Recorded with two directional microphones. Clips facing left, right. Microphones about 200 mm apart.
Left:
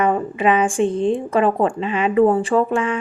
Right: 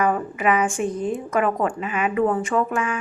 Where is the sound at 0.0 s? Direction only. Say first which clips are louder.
Left 3 dB; 25° left (ahead or behind).